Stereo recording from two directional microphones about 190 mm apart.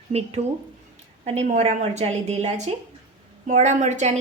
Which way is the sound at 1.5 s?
35° right (ahead or behind).